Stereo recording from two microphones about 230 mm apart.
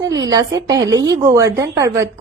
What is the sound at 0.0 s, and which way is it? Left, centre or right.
A woman's voice, centre.